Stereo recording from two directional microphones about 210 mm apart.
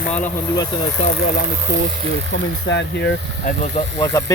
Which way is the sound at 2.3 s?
60° left (ahead or behind).